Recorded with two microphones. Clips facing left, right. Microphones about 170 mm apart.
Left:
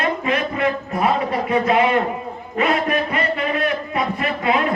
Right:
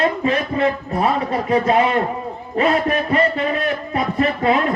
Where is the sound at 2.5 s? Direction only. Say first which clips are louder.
Right 2 dB; 35° right (ahead or behind).